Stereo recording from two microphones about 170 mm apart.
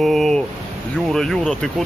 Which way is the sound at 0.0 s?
Centre (ahead or behind).